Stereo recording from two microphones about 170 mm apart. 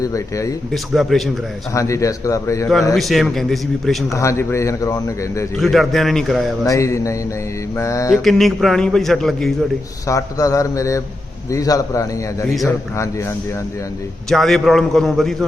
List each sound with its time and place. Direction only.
0.0 s a man's voice: 20° left (ahead or behind)
0.7 s a man's voice: centre (ahead or behind)
1.7 s a man's voice: 20° left (ahead or behind)
2.9 s a man's voice: centre (ahead or behind)
4.1 s speech: 15° left (ahead or behind)
5.5 s a man's voice: centre (ahead or behind)
6.7 s a man's voice: 20° left (ahead or behind)
8.1 s a man's voice: centre (ahead or behind)
10.1 s a man's voice: 20° left (ahead or behind)
14.3 s a man's voice: centre (ahead or behind)